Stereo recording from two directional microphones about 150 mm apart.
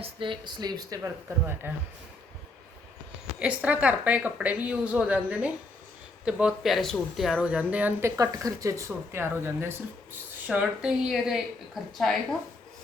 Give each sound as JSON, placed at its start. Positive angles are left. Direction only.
{"t": 0.0, "sound": "speech", "side_deg": -35}
{"t": 3.4, "sound": "speech", "side_deg": -10}